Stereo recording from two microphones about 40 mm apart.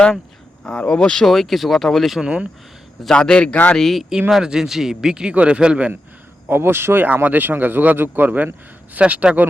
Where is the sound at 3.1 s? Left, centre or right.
Left.